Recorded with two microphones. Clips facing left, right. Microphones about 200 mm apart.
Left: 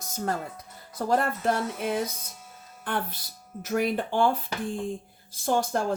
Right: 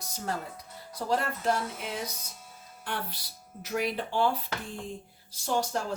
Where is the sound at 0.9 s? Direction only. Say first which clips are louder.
Left 4 dB; 50° left (ahead or behind).